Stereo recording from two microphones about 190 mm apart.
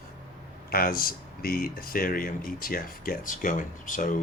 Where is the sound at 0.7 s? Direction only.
50° left (ahead or behind).